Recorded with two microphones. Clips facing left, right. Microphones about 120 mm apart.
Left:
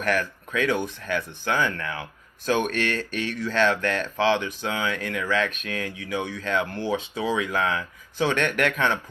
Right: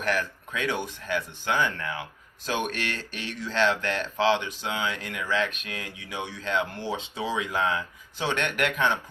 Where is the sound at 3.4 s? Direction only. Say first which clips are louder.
Left 2 dB; 20° right (ahead or behind).